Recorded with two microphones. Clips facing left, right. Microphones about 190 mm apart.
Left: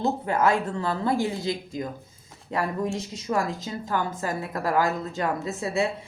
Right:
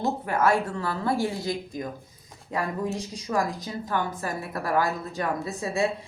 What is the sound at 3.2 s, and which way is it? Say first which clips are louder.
Speech: even; 25° left (ahead or behind).